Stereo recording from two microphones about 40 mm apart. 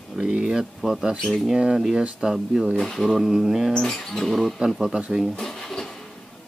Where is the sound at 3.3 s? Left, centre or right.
Centre.